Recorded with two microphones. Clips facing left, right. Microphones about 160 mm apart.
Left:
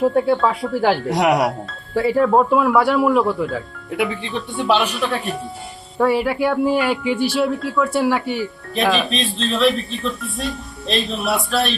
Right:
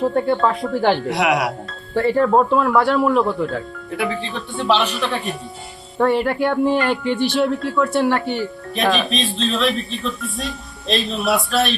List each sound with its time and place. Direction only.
0.0 s speech: 5° left (ahead or behind)
1.1 s speech: 40° left (ahead or behind)
1.6 s a woman's voice: 5° left (ahead or behind)